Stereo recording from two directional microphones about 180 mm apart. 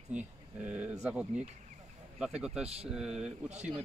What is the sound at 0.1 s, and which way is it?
Speech, 10° right (ahead or behind).